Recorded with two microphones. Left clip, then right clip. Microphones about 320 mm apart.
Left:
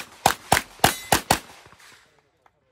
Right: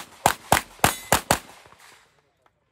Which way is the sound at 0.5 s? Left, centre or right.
Centre.